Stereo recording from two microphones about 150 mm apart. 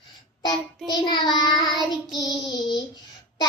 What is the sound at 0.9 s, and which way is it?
Child singing, 30° left (ahead or behind).